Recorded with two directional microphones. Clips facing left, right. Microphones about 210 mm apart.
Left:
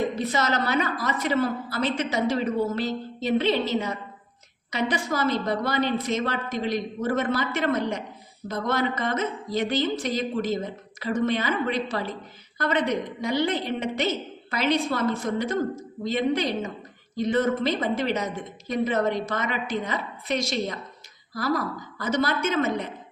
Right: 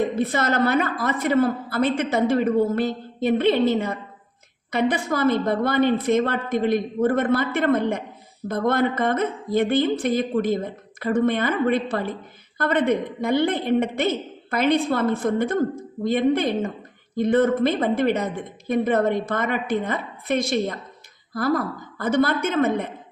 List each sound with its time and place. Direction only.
0.2 s a woman's voice: 55° right (ahead or behind)